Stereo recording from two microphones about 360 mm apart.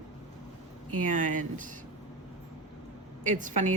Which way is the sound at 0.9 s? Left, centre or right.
Right.